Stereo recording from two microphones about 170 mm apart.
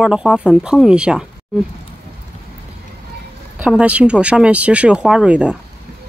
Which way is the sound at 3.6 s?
5° right (ahead or behind).